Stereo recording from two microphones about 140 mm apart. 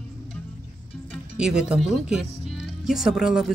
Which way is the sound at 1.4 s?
5° right (ahead or behind).